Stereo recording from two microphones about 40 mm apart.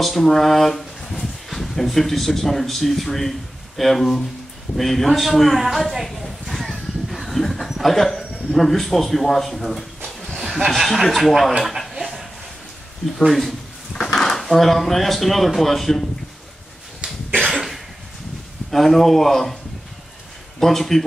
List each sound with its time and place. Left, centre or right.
0.0 s speech: centre
6.2 s a sound: centre
7.8 s speech: centre
10.0 s dog: centre
10.4 s speech: centre
12.0 s a sound: centre
13.0 s speech: centre
17.0 s cough: right
18.7 s speech: centre